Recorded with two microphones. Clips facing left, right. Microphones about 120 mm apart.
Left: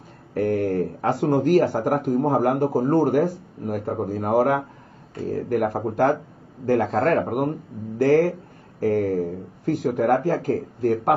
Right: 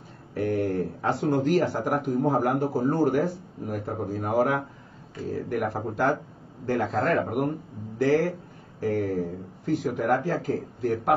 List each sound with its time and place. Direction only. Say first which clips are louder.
0.3 s speech: left 4 dB; 40° left (ahead or behind)
6.9 s speech: left 4 dB; centre (ahead or behind)
7.2 s speech: left 3 dB; 50° left (ahead or behind)